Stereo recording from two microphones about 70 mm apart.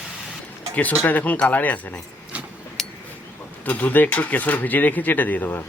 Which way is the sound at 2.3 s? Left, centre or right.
Right.